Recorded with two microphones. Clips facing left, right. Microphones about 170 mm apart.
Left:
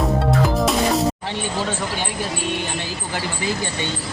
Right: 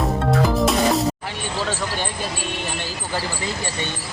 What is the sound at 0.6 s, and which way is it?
Music, centre (ahead or behind).